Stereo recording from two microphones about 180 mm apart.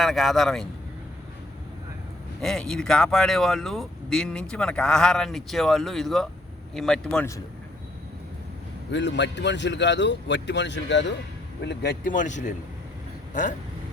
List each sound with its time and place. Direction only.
0.0 s speech: centre (ahead or behind)
2.4 s speech: centre (ahead or behind)
8.9 s a man's voice: 80° left
11.6 s speech: 65° left (ahead or behind); by 12.5 s 45° left (ahead or behind)